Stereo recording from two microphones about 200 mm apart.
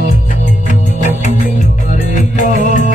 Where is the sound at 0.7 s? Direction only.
40° left (ahead or behind).